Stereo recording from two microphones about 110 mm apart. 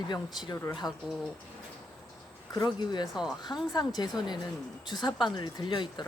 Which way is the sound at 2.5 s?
40° left (ahead or behind).